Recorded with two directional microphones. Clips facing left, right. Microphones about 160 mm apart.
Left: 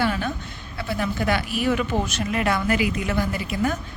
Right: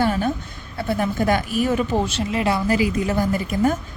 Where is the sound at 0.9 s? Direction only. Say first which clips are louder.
Right 4 dB; 40° right (ahead or behind).